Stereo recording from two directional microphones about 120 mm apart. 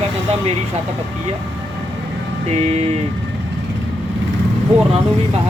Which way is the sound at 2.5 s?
70° right (ahead or behind).